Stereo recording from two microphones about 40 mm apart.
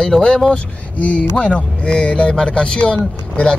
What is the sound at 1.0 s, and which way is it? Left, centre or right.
Speech, left.